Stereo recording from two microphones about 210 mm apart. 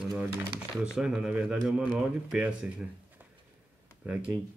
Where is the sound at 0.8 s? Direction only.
5° right (ahead or behind).